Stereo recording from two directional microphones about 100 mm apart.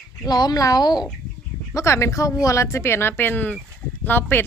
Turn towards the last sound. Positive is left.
turn(degrees=20)  # may be behind; listen again after turning